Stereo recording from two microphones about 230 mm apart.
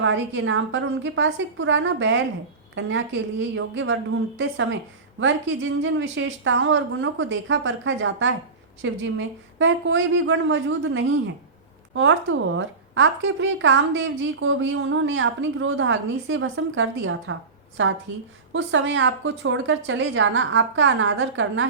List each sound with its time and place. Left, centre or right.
0.0 s a woman's voice: right